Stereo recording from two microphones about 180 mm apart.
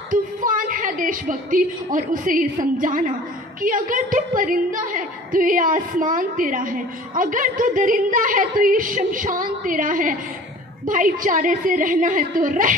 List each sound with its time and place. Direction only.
0.1 s a woman's voice: 50° right (ahead or behind)